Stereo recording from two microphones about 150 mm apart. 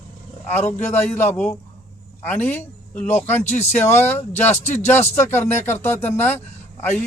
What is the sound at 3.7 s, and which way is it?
Speech, 15° left (ahead or behind).